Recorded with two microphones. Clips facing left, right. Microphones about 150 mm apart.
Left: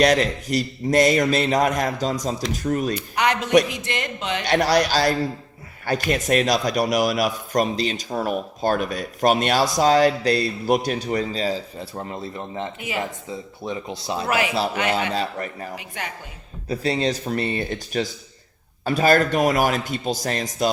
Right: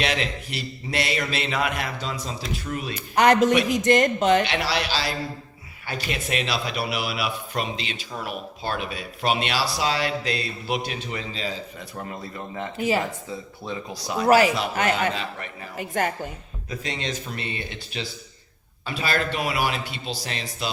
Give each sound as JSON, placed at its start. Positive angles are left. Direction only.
{"t": 0.0, "sound": "a man's voice", "side_deg": 40}
{"t": 3.2, "sound": "speech", "side_deg": -45}
{"t": 4.4, "sound": "a man's voice", "side_deg": 45}
{"t": 12.7, "sound": "speech", "side_deg": -40}
{"t": 13.7, "sound": "speech", "side_deg": 25}
{"t": 14.3, "sound": "speech", "side_deg": -35}
{"t": 15.1, "sound": "a man's voice", "side_deg": 40}
{"t": 15.7, "sound": "speech", "side_deg": -45}
{"t": 16.6, "sound": "a man's voice", "side_deg": 35}